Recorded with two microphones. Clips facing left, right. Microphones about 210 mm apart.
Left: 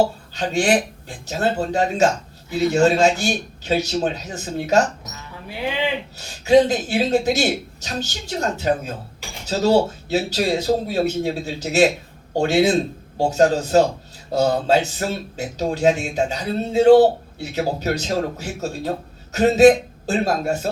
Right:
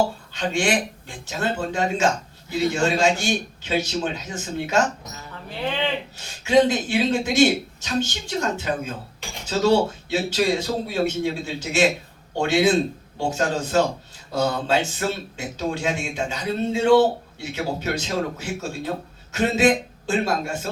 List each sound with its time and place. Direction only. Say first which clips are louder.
0.3 s speech: left 4 dB; 40° left (ahead or behind)
5.3 s speech: left 2 dB; 10° left (ahead or behind)
6.1 s speech: left 3 dB; 40° left (ahead or behind)